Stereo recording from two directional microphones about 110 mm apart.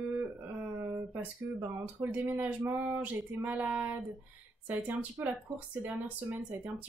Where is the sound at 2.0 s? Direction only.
15° right (ahead or behind).